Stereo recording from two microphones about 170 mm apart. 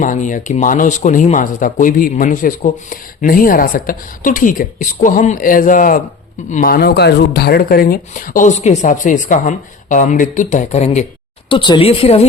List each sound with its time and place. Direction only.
0.0 s speech: 50° left (ahead or behind)
11.4 s speech: 30° left (ahead or behind)